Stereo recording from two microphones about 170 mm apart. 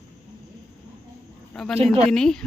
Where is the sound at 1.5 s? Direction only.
Centre (ahead or behind).